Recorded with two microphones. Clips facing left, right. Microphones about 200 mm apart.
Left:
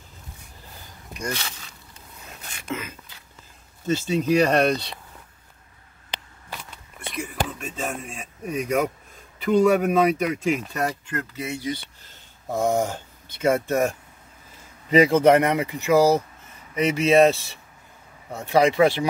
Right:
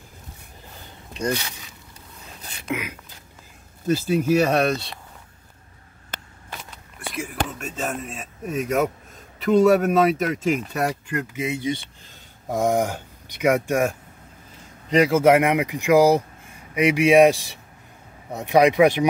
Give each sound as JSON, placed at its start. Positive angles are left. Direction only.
{"t": 1.3, "sound": "speech", "side_deg": -10}
{"t": 2.7, "sound": "speech", "side_deg": -10}
{"t": 7.2, "sound": "speech", "side_deg": 0}
{"t": 14.9, "sound": "speech", "side_deg": 0}